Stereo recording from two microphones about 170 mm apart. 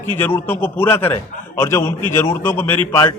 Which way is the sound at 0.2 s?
15° left (ahead or behind).